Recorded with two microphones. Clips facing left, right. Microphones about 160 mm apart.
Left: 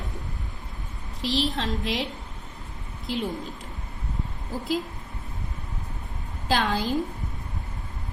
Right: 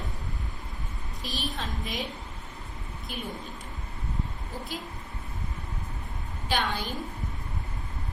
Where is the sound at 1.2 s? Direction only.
90° left.